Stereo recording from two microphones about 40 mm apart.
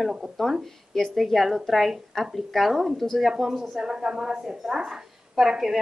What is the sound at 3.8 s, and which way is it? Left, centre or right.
A woman's voice, centre.